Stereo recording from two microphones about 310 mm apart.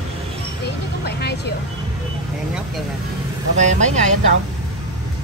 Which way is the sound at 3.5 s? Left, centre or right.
Right.